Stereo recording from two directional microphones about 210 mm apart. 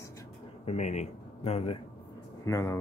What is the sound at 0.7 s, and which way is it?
Speech, 35° left (ahead or behind).